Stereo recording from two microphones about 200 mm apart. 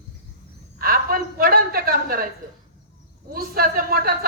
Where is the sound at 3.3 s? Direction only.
45° right (ahead or behind).